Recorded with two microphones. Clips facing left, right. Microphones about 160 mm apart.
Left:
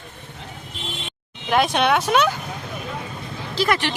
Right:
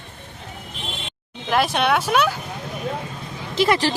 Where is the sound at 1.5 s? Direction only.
Centre (ahead or behind).